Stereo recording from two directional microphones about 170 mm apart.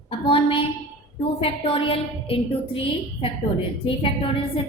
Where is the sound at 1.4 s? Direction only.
30° left (ahead or behind).